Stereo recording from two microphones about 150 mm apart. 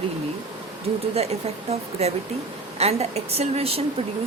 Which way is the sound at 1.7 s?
45° right (ahead or behind).